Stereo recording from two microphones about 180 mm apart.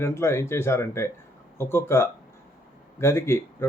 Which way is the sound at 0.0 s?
15° left (ahead or behind).